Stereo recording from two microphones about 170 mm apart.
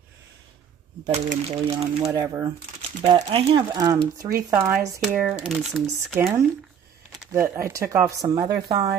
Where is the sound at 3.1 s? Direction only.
35° right (ahead or behind).